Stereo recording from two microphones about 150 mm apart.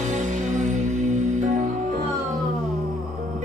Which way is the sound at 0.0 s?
55° right (ahead or behind).